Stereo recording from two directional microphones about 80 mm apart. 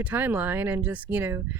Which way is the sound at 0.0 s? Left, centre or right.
Right.